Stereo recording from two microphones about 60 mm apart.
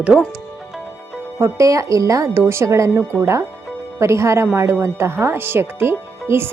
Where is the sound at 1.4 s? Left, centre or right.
Right.